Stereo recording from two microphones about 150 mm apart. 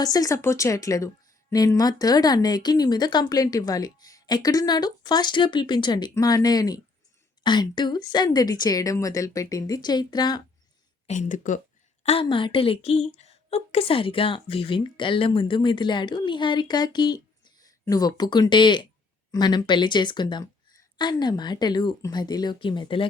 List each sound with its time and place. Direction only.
0.0 s a woman's voice: 25° left (ahead or behind)
11.0 s speech: 50° left (ahead or behind)
12.0 s a woman's voice: 35° left (ahead or behind)